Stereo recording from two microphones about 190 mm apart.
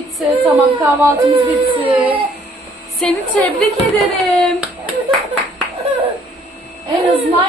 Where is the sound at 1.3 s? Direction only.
25° right (ahead or behind).